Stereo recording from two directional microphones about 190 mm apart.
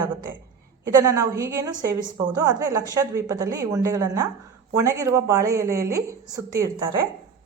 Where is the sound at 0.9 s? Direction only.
15° right (ahead or behind).